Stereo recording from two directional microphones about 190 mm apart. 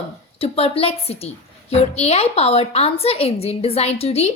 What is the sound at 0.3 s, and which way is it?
A woman's voice, 30° left (ahead or behind).